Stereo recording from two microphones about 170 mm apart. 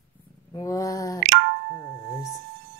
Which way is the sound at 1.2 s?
70° right (ahead or behind).